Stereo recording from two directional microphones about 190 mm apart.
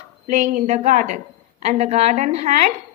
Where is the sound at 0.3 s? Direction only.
40° right (ahead or behind).